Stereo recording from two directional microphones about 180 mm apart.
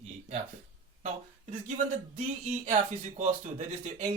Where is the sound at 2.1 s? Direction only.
40° right (ahead or behind).